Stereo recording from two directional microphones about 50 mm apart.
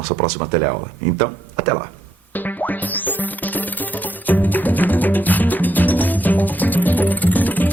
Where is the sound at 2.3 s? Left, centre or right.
Left.